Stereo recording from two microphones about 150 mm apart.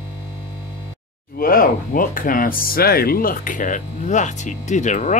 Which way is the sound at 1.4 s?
70° left (ahead or behind).